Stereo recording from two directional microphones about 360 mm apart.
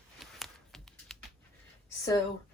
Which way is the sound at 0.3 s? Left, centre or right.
Centre.